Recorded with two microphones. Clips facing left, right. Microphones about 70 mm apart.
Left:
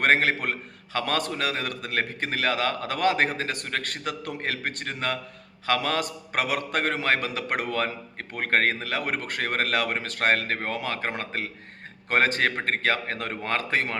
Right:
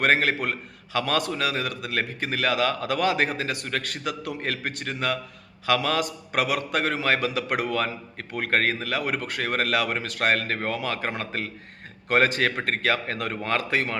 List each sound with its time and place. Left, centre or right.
0.0 s speech: left